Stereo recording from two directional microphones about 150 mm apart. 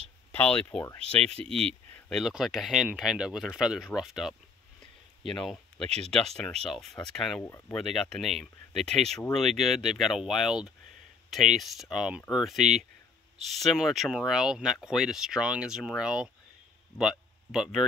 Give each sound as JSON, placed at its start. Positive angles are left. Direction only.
{"t": 0.3, "sound": "speech", "side_deg": 10}
{"t": 1.5, "sound": "speech", "side_deg": -40}
{"t": 2.0, "sound": "speech", "side_deg": 0}
{"t": 7.4, "sound": "speech", "side_deg": 20}
{"t": 7.7, "sound": "speech", "side_deg": 0}